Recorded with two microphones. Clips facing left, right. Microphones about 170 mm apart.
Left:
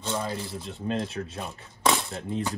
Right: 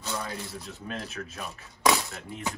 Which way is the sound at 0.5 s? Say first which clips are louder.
Left 7 dB; 30° left (ahead or behind).